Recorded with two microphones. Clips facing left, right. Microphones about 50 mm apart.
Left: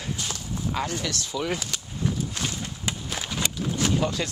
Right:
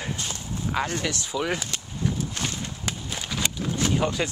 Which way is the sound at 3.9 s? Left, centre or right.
Right.